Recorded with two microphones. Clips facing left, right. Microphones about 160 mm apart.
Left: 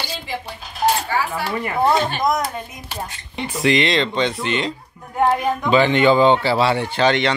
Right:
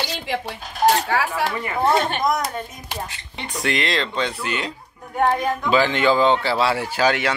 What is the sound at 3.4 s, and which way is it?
Speech, centre (ahead or behind).